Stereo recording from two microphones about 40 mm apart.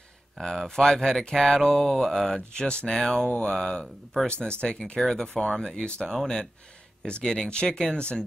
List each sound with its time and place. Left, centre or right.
0.4 s speech: centre
4.3 s speech: left
5.0 s speech: centre
6.0 s speech: centre